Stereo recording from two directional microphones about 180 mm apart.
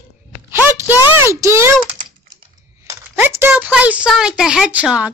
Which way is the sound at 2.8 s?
15° right (ahead or behind).